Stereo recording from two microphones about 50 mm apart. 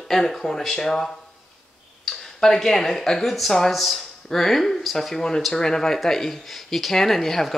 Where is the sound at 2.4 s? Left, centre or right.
Centre.